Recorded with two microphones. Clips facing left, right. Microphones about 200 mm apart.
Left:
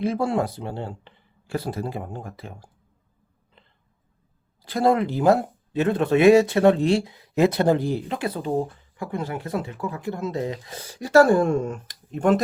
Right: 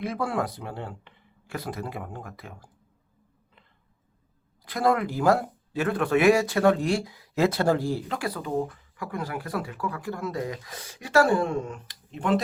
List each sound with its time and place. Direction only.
0.0 s speech: 25° left (ahead or behind)
4.6 s speech: 30° left (ahead or behind); by 12.4 s 45° left (ahead or behind)